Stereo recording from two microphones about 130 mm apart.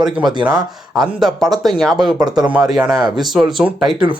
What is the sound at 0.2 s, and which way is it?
Speech, 35° right (ahead or behind).